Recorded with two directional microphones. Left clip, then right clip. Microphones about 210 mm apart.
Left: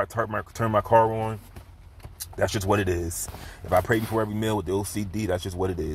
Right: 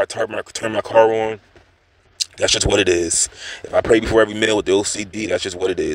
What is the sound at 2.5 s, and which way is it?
Speech, 55° right (ahead or behind).